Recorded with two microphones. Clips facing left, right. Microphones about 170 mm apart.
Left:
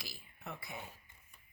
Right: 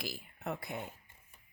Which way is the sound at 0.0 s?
65° right (ahead or behind).